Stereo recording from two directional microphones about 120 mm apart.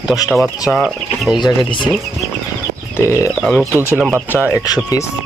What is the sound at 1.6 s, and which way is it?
Speech, 40° left (ahead or behind).